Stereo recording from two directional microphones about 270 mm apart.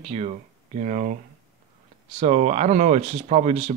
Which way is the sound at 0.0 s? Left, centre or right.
Right.